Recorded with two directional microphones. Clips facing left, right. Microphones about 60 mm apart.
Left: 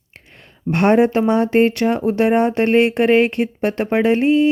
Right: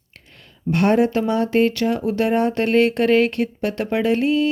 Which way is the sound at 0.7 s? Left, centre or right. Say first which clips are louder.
Left 3 dB; left.